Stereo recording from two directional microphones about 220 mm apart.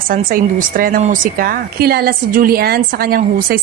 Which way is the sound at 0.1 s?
40° right (ahead or behind).